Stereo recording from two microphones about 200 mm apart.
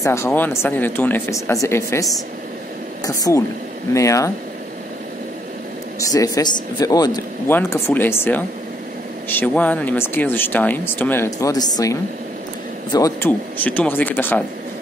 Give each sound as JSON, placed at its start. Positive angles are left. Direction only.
{"t": 0.0, "sound": "speech", "side_deg": 15}
{"t": 3.1, "sound": "speech", "side_deg": 15}
{"t": 5.9, "sound": "speech", "side_deg": 15}